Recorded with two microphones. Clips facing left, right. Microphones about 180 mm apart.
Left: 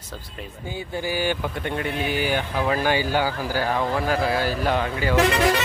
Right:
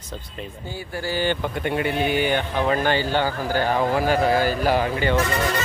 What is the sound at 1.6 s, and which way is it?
Speech, 5° right (ahead or behind).